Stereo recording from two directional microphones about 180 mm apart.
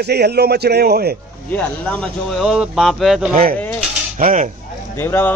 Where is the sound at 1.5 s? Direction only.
10° left (ahead or behind).